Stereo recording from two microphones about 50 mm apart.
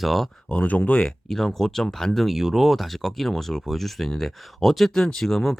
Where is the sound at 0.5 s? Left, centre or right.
Left.